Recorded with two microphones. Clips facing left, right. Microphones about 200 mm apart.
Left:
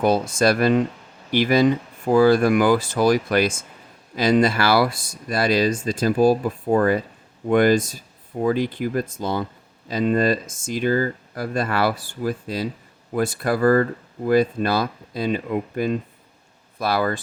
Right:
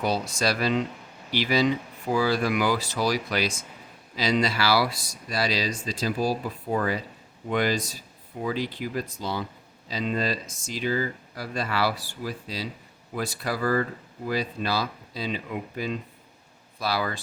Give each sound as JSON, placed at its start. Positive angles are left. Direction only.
{"t": 0.0, "sound": "speech", "side_deg": 50}